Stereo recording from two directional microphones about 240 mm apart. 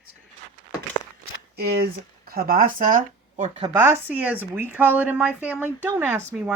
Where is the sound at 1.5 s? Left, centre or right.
Right.